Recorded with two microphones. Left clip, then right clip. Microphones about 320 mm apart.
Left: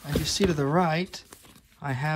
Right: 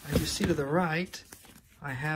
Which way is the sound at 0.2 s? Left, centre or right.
Centre.